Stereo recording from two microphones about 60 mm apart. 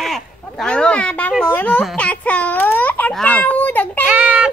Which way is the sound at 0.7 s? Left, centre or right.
Centre.